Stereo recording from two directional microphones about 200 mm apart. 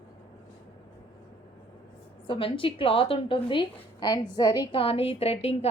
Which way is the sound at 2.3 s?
25° left (ahead or behind).